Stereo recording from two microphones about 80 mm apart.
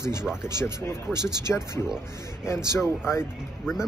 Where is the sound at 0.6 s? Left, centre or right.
Left.